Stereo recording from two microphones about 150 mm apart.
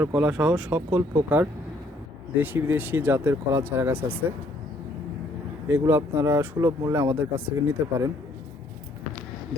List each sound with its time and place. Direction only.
0.2 s speech: 10° right (ahead or behind)
5.6 s speech: 15° right (ahead or behind)